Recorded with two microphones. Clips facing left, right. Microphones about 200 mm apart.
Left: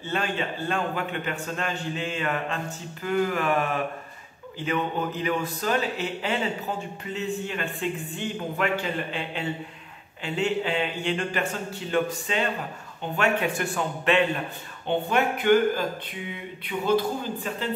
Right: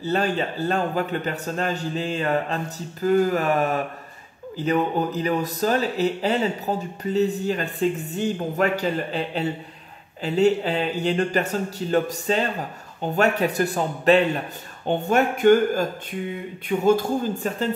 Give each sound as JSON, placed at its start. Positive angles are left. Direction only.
{"t": 0.0, "sound": "speech", "side_deg": -40}